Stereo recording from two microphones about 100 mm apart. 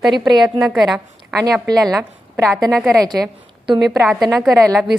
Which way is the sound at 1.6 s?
40° right (ahead or behind).